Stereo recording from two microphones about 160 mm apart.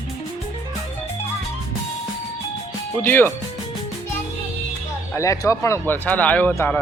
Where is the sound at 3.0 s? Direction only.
10° left (ahead or behind).